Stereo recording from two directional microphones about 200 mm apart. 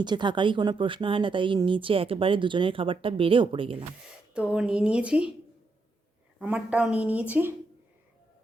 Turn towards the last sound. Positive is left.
turn(degrees=-10)  # may be behind; listen again after turning